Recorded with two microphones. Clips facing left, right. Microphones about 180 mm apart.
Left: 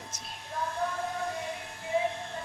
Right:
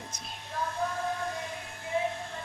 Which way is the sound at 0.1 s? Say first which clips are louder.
Right 1 dB; centre (ahead or behind).